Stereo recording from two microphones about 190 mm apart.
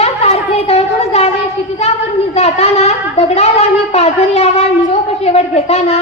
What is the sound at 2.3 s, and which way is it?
Speech, 35° left (ahead or behind).